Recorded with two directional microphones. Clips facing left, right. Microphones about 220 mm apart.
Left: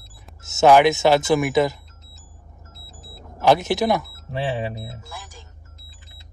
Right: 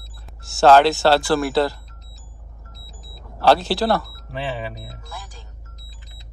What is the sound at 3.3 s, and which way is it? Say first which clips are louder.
Speech: even; 20° left (ahead or behind).